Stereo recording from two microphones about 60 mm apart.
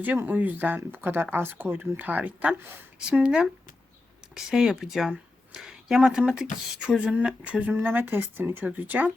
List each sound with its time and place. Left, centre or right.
0.0 s speech: right
7.7 s speech: right